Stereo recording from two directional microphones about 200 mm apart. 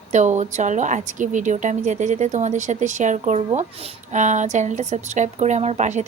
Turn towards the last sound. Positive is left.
turn(degrees=-35)  # may be behind; listen again after turning